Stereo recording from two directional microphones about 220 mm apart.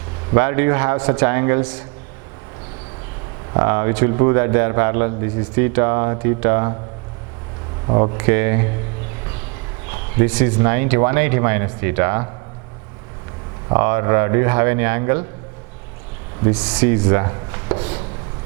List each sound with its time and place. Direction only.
0.3 s a man's voice: 10° right (ahead or behind)
3.5 s a man's voice: 15° right (ahead or behind)
7.9 s speech: 25° right (ahead or behind)
8.2 s a man's voice: 15° right (ahead or behind)
9.9 s a man's voice: 10° right (ahead or behind)
13.7 s a man's voice: 15° right (ahead or behind)
16.6 s speech: 5° right (ahead or behind); by 18.0 s 25° right (ahead or behind)